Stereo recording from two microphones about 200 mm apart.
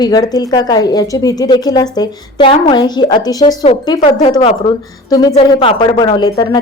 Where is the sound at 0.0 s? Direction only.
20° left (ahead or behind).